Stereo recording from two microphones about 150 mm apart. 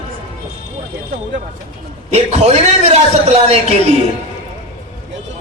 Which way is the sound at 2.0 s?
45° right (ahead or behind).